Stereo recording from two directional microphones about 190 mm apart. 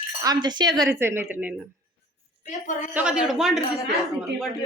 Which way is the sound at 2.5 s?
40° left (ahead or behind).